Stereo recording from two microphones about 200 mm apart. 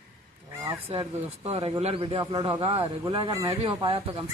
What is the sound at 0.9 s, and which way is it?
A man's voice, 30° right (ahead or behind).